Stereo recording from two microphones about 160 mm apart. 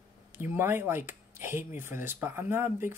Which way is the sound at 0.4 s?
15° right (ahead or behind).